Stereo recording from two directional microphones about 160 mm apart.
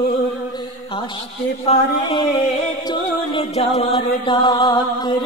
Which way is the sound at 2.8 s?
30° left (ahead or behind).